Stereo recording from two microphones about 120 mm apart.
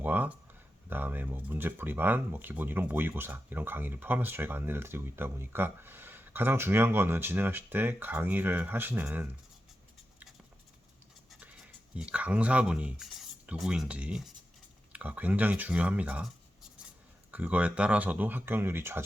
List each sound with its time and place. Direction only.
0.0 s a sound: 15° right (ahead or behind)
0.9 s speech: 15° right (ahead or behind)
11.3 s dog: 10° right (ahead or behind)
11.9 s speech: 10° right (ahead or behind)
17.3 s speech: 15° right (ahead or behind)